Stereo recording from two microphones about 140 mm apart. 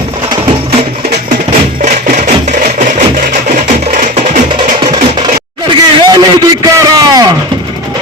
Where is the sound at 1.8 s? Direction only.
60° right (ahead or behind).